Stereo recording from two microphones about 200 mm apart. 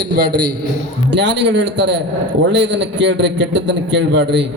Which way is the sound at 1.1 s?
60° right (ahead or behind).